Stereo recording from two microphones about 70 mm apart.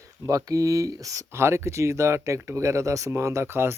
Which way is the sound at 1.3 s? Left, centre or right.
Right.